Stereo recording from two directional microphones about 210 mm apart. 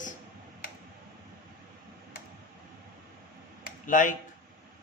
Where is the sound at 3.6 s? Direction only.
40° left (ahead or behind).